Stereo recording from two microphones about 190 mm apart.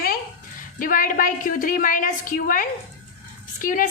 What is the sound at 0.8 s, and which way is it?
A woman's voice, 45° left (ahead or behind).